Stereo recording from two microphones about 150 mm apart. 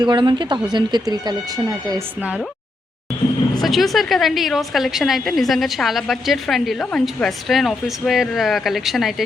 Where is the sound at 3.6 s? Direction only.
Centre (ahead or behind).